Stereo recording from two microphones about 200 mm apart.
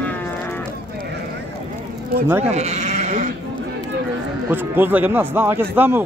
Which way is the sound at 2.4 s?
35° right (ahead or behind).